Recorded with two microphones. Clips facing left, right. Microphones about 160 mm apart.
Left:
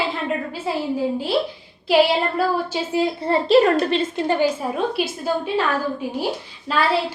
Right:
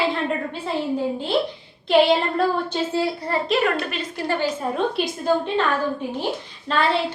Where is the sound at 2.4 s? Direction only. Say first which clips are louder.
Even; 5° left (ahead or behind).